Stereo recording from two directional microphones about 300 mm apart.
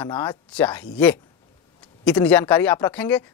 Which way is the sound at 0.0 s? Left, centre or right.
Centre.